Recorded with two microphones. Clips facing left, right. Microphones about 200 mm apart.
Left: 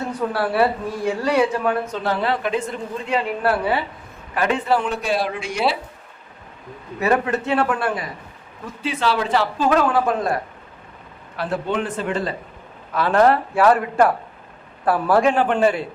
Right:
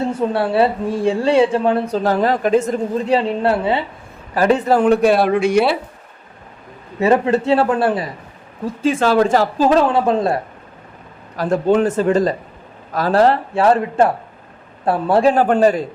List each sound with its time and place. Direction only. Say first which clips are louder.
0.0 s speech: right 5 dB; 25° right (ahead or behind)
4.4 s speech: right 6 dB; 40° right (ahead or behind); by 5.7 s 60° right (ahead or behind)
7.0 s a man's voice: right 5 dB; 30° right (ahead or behind)
8.6 s speech: right 6 dB; 45° right (ahead or behind)
9.6 s speech: right 3 dB; 30° right (ahead or behind)
11.3 s a man's voice: right 8 dB; 40° right (ahead or behind)